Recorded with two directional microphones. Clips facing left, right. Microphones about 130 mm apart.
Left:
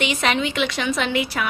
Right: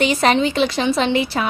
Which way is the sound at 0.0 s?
35° right (ahead or behind).